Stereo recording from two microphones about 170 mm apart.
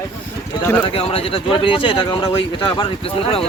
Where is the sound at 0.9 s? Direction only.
35° left (ahead or behind).